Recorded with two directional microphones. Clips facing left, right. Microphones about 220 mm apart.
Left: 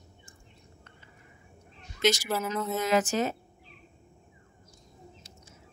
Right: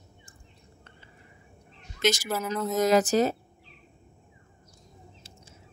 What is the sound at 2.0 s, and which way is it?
Speech, 50° right (ahead or behind).